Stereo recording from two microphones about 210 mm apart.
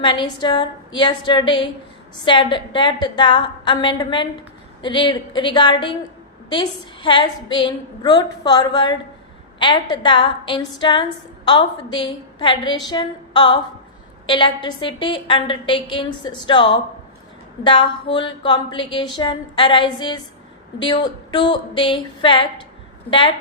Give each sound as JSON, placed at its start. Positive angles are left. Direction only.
{"t": 0.0, "sound": "a woman's voice", "side_deg": 20}